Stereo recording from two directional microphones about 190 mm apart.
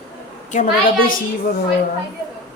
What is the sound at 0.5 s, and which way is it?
Speech, 45° left (ahead or behind).